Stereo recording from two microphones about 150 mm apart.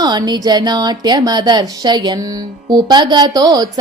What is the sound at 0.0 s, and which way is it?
Music, 30° right (ahead or behind).